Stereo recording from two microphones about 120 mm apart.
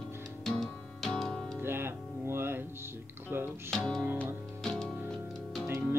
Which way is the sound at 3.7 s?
5° left (ahead or behind).